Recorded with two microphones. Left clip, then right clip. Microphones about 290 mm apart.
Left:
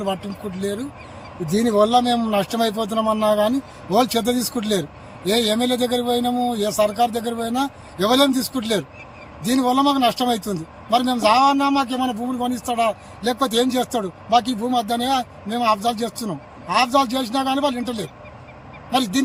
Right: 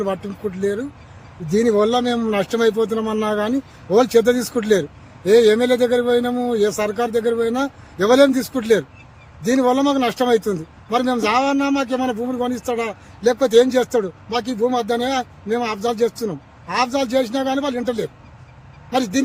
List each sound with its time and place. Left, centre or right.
1.5 s speech: centre